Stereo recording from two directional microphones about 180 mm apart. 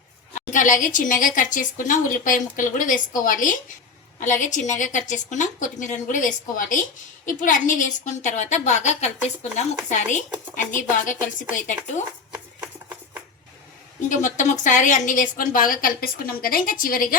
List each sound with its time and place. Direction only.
0.3 s a woman's voice: 45° left (ahead or behind)
12.3 s a sound: 10° right (ahead or behind)
14.1 s a woman's voice: 45° left (ahead or behind)